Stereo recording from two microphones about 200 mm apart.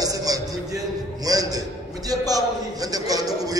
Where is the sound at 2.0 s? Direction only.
20° right (ahead or behind).